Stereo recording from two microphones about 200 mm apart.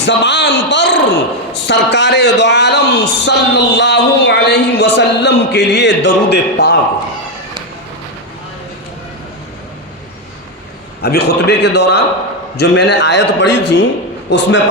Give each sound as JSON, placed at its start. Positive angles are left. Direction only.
{"t": 0.0, "sound": "a man's voice", "side_deg": 60}
{"t": 11.0, "sound": "a man's voice", "side_deg": 55}